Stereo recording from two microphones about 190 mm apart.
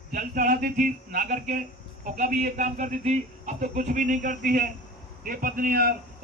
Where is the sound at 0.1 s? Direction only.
45° right (ahead or behind).